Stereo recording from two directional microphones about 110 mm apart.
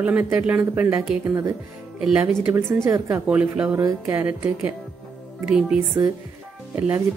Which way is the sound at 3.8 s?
30° right (ahead or behind).